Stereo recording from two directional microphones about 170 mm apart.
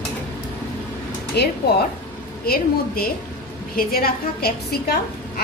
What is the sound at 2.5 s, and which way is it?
A woman's voice, 60° left (ahead or behind).